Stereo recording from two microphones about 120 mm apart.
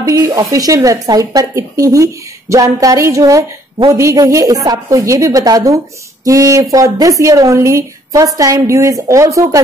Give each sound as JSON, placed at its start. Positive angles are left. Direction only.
{"t": 0.0, "sound": "a woman's voice", "side_deg": -25}